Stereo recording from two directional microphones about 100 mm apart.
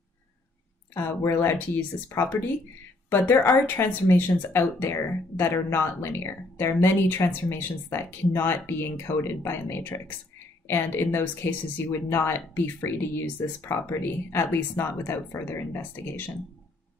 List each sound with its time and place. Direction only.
0.9 s speech: 25° left (ahead or behind)
3.6 s speech: 20° left (ahead or behind)